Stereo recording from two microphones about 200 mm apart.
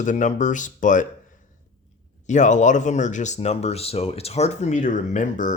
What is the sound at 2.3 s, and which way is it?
Speech, 35° left (ahead or behind).